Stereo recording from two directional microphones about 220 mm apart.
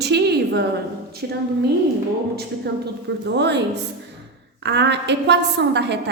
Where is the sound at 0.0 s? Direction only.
50° right (ahead or behind).